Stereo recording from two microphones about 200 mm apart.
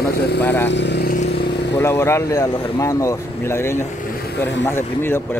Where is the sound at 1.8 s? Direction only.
15° left (ahead or behind).